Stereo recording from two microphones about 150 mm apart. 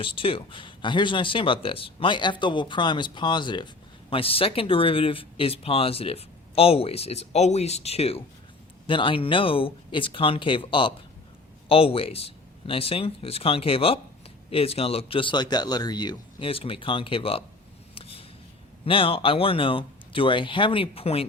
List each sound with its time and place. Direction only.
0.0 s speech: 35° left (ahead or behind)
17.9 s a sound: 40° left (ahead or behind)
18.9 s speech: 35° left (ahead or behind)